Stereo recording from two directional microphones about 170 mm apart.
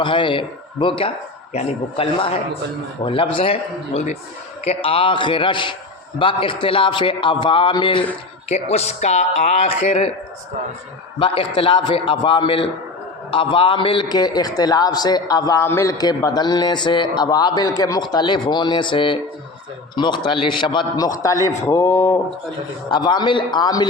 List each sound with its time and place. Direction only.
0.0 s a man's voice: 30° left (ahead or behind)
8.4 s speech: 40° left (ahead or behind)
11.2 s a man's voice: 30° left (ahead or behind)